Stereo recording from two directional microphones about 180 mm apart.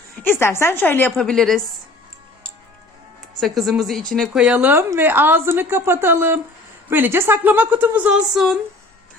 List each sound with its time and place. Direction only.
0.2 s a woman's voice: 10° left (ahead or behind)
3.4 s a woman's voice: centre (ahead or behind)